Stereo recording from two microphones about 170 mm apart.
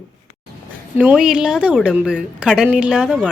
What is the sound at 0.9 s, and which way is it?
Speech, 5° right (ahead or behind).